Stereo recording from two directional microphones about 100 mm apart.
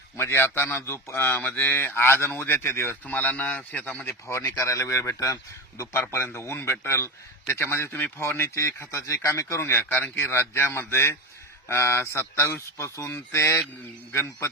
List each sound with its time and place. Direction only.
0.2 s speech: 25° left (ahead or behind)
4.4 s speech: 30° left (ahead or behind)